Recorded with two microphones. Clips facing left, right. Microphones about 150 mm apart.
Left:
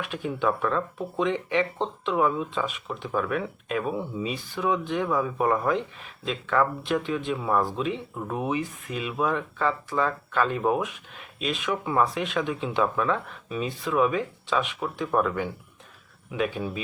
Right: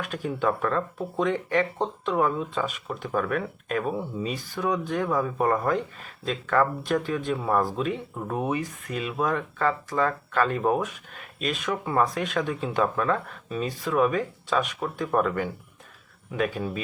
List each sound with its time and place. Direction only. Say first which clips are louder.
0.0 s speech: even; 40° right (ahead or behind)